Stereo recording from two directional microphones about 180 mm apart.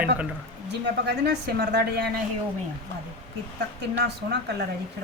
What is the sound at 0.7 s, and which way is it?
A woman's voice, 65° right (ahead or behind).